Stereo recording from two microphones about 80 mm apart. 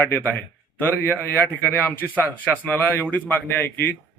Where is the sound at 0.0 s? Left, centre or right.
Left.